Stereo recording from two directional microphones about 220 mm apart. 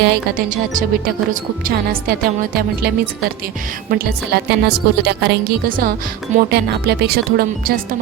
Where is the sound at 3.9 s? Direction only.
45° right (ahead or behind).